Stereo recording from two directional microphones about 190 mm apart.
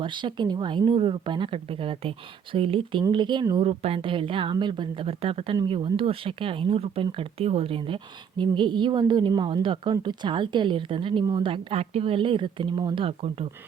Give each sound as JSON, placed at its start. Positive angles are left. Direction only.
{"t": 0.0, "sound": "speech", "side_deg": -25}